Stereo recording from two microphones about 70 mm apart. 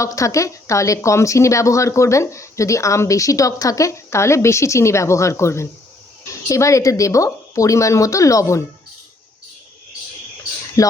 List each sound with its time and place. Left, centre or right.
0.0 s speech: left
10.8 s speech: left